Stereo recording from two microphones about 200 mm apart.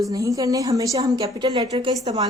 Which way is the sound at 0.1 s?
15° right (ahead or behind).